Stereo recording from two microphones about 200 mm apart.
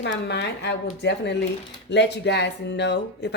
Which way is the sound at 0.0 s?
60° left (ahead or behind).